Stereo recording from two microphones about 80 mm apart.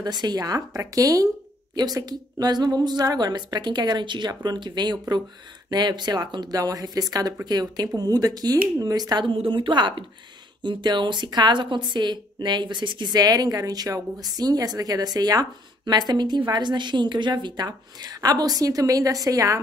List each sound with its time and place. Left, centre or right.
0.0 s speech: right
1.8 s a woman's voice: right
4.3 s a woman's voice: right
9.3 s a woman's voice: right